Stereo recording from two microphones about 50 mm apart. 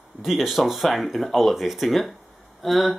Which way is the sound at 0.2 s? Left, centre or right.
Centre.